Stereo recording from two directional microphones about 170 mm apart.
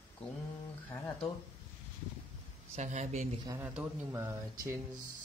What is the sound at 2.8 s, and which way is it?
Speech, 45° right (ahead or behind).